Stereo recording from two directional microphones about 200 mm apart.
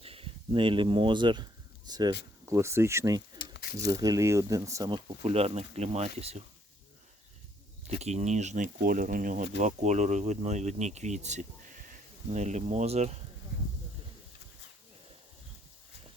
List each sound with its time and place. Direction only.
0.0 s speech: 30° right (ahead or behind)
3.5 s a sound: 55° left (ahead or behind)
3.9 s speech: 15° right (ahead or behind)
7.9 s speech: 35° right (ahead or behind)